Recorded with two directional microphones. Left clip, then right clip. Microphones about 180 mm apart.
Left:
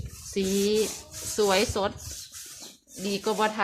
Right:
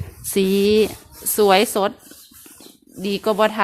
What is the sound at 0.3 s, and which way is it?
Speech, 60° right (ahead or behind).